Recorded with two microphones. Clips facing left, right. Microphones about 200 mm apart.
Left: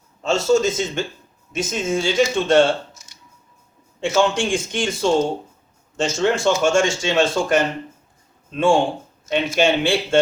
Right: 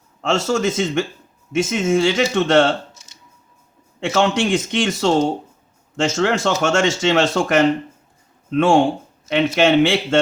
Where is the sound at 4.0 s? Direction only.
70° right (ahead or behind).